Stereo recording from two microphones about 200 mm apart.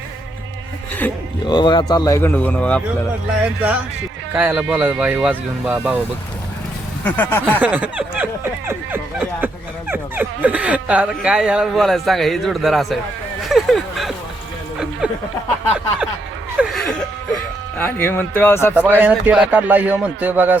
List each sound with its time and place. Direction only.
1.5 s speech: 20° left (ahead or behind)
3.4 s speech: 10° right (ahead or behind)
7.0 s speech: 10° left (ahead or behind)
7.6 s speech: 5° right (ahead or behind)
13.5 s a sound: centre (ahead or behind)
15.0 s speech: 5° right (ahead or behind)
16.6 s gasp: centre (ahead or behind)
17.7 s speech: 10° left (ahead or behind)
18.7 s speech: 10° right (ahead or behind)